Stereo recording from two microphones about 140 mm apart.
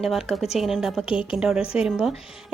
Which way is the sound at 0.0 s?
Centre (ahead or behind).